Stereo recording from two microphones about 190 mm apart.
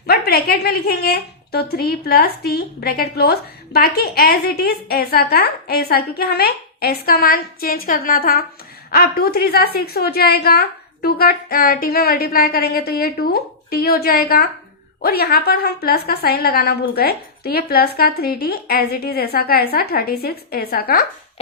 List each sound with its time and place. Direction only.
0.1 s a woman's voice: 55° left (ahead or behind)